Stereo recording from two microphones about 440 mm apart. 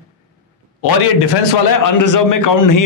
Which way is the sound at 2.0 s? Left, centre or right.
Left.